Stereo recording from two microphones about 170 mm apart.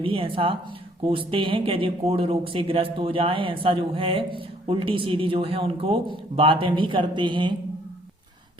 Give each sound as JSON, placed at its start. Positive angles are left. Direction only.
{"t": 0.0, "sound": "speech", "side_deg": -30}